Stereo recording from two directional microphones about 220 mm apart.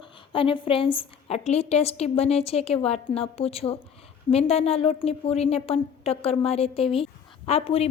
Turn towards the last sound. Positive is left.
turn(degrees=25)  # may be behind; listen again after turning